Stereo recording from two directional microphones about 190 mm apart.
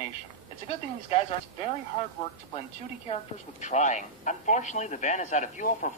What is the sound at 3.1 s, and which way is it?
Speech, 35° left (ahead or behind).